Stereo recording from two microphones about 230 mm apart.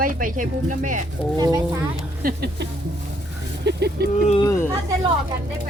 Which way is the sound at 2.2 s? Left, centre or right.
Right.